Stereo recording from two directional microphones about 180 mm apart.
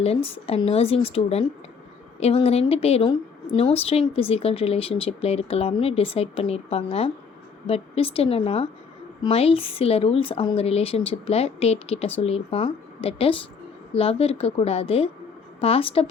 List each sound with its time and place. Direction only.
0.0 s a woman's voice: 35° left (ahead or behind)